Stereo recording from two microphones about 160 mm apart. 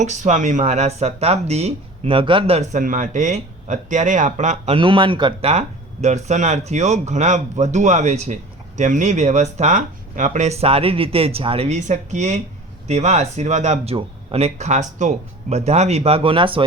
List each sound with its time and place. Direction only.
0.0 s speech: 50° right (ahead or behind)
2.8 s speech: 55° right (ahead or behind)
4.7 s speech: 30° right (ahead or behind)